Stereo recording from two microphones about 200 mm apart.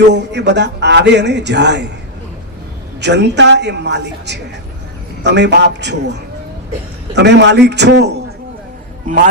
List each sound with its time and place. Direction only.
0.1 s a man's voice: 60° right (ahead or behind)
3.0 s a man's voice: 60° right (ahead or behind)
7.2 s a man's voice: 60° right (ahead or behind)